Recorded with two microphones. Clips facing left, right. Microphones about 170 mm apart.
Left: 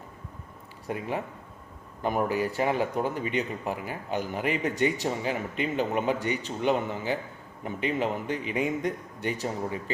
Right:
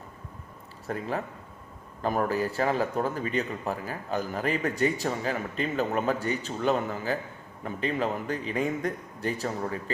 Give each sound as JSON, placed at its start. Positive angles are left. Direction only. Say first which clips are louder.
{"t": 2.0, "sound": "a man's voice", "louder": "even", "side_deg": 20}